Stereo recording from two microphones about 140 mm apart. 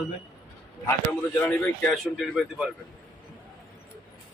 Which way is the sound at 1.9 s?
Centre (ahead or behind).